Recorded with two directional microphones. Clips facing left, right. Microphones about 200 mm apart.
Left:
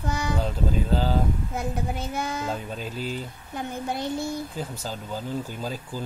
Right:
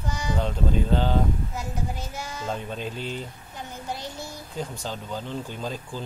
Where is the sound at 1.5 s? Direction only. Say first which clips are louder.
Left 3 dB; 55° left (ahead or behind).